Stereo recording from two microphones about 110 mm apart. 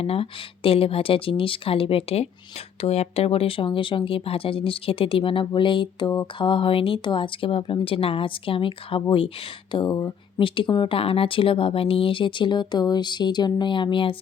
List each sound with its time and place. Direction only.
0.0 s speech: 60° left (ahead or behind); by 6.5 s 40° left (ahead or behind)
6.5 s speech: 55° left (ahead or behind)
9.7 s speech: 40° left (ahead or behind)